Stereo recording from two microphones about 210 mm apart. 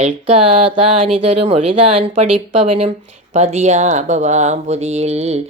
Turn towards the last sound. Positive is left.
turn(degrees=-30)  # may be behind; listen again after turning